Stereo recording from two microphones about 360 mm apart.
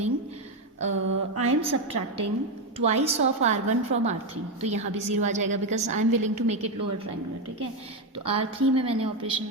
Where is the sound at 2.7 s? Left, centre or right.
Centre.